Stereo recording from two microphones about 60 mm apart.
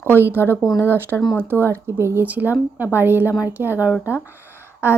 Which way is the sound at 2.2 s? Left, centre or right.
Right.